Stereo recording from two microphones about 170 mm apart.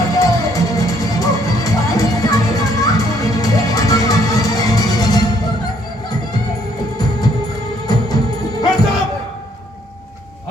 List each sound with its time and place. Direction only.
0.1 s music: 20° left (ahead or behind)
7.9 s music: 20° left (ahead or behind)